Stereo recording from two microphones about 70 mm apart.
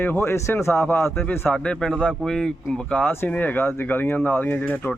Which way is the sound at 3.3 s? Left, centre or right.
Left.